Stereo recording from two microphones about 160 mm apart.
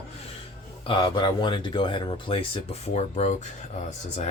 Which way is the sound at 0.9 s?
30° left (ahead or behind).